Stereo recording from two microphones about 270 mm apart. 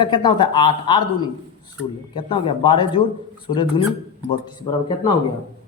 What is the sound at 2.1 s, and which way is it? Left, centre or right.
Speech, centre.